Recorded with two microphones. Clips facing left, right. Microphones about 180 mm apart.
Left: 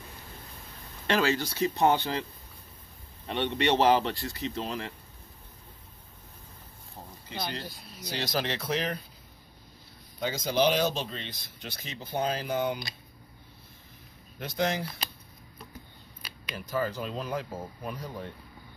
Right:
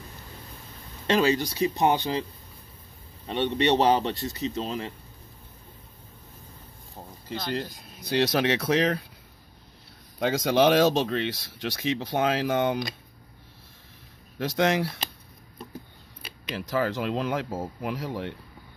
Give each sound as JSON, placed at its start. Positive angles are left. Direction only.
{"t": 1.0, "sound": "speech", "side_deg": -20}
{"t": 3.3, "sound": "speech", "side_deg": -20}
{"t": 8.0, "sound": "speech", "side_deg": -65}
{"t": 10.1, "sound": "speech", "side_deg": -90}
{"t": 14.4, "sound": "speech", "side_deg": -90}
{"t": 16.5, "sound": "speech", "side_deg": -85}